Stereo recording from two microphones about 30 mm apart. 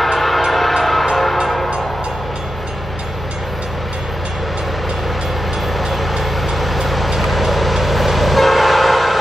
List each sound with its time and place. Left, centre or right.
0.0 s train: centre
5.8 s vehicle: centre